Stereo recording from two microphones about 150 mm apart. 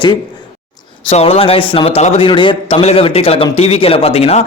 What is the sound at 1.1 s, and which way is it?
A man's voice, 45° left (ahead or behind).